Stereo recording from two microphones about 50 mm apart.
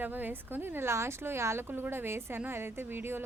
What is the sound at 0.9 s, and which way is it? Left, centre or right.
Speech, right.